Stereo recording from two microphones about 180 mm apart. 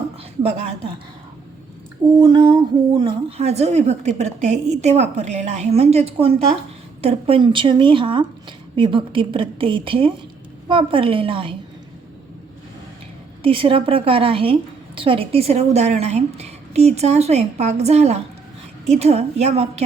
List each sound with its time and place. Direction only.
2.2 s a woman's voice: 25° right (ahead or behind)
13.4 s a woman's voice: 30° right (ahead or behind)